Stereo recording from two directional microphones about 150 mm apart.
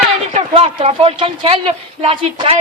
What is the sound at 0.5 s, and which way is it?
Speech, 35° right (ahead or behind).